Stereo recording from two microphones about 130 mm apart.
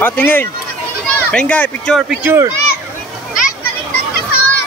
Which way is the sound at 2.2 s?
15° right (ahead or behind).